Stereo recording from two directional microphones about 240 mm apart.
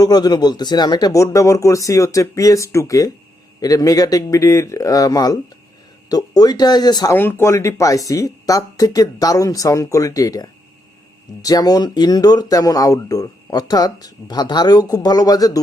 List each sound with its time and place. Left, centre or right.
0.0 s speech: centre